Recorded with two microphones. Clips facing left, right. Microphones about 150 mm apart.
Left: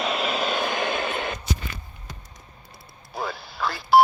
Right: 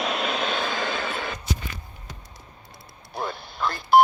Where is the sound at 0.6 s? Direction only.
15° left (ahead or behind).